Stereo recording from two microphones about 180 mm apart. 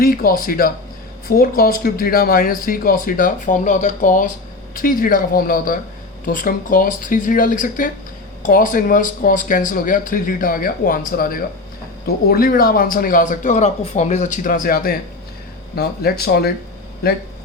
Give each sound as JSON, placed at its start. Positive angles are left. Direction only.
{"t": 0.0, "sound": "speech", "side_deg": 55}